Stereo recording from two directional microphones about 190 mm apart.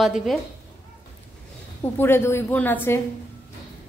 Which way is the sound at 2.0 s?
10° left (ahead or behind).